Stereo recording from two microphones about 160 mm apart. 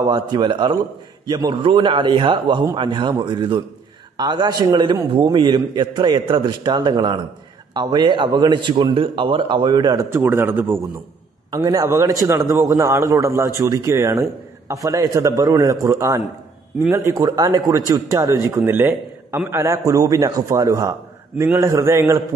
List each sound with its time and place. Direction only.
0.0 s a man's voice: 25° right (ahead or behind)
11.5 s a man's voice: 25° right (ahead or behind)